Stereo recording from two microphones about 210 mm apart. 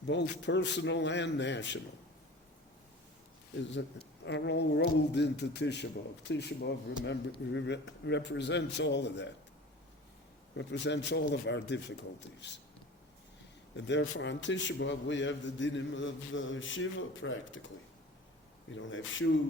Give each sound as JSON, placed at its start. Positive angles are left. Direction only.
{"t": 0.1, "sound": "a man's voice", "side_deg": 55}
{"t": 3.6, "sound": "a man's voice", "side_deg": 60}
{"t": 10.6, "sound": "a man's voice", "side_deg": 55}
{"t": 13.7, "sound": "a man's voice", "side_deg": 55}
{"t": 18.7, "sound": "a man's voice", "side_deg": 65}